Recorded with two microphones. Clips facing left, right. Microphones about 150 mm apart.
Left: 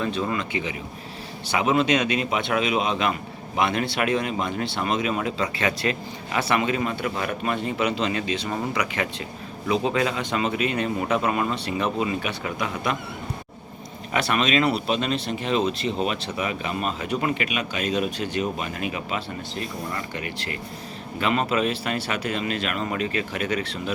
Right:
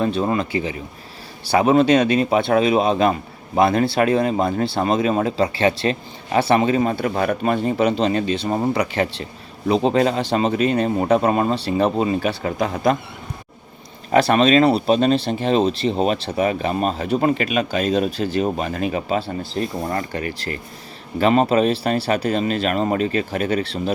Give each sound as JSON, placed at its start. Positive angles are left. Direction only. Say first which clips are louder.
{"t": 0.0, "sound": "speech", "louder": "right 6 dB", "side_deg": -35}
{"t": 14.1, "sound": "speech", "louder": "right 8 dB", "side_deg": -35}